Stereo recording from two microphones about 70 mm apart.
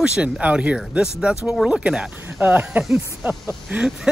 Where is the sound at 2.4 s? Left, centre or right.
Right.